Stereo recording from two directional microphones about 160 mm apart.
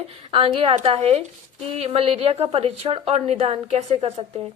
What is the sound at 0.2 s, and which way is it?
A woman's voice, 35° right (ahead or behind).